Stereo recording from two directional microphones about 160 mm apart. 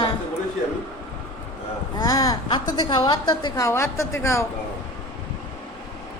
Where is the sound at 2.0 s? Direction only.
20° left (ahead or behind).